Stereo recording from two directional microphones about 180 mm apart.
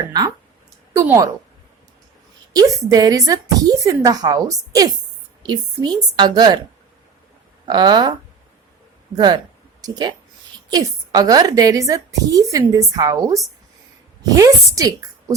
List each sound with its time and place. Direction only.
0.9 s a woman's voice: 15° right (ahead or behind)
2.5 s a woman's voice: 20° right (ahead or behind)
7.6 s a woman's voice: 25° right (ahead or behind)
9.1 s a woman's voice: 25° right (ahead or behind)